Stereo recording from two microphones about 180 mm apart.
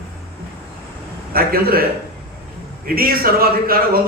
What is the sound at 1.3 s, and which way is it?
Speech, 55° right (ahead or behind).